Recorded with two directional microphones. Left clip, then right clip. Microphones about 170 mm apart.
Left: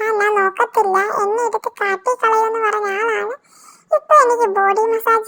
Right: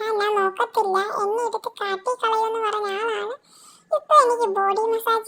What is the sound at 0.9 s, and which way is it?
Speech, 35° left (ahead or behind).